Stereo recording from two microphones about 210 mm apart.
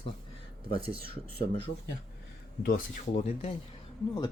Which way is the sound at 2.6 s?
45° left (ahead or behind).